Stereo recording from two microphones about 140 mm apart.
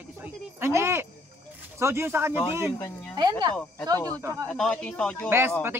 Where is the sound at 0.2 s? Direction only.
15° right (ahead or behind).